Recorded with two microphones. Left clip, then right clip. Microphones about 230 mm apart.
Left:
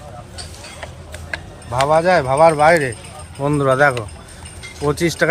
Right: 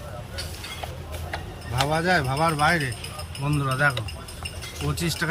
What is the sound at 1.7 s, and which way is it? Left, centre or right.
Speech, centre.